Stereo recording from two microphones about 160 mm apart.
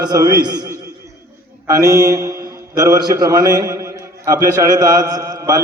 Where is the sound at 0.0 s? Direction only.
25° right (ahead or behind).